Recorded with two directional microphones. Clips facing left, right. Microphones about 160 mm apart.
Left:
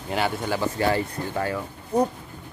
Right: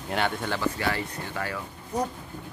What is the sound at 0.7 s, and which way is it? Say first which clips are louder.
Speech: left 6 dB; 30° left (ahead or behind).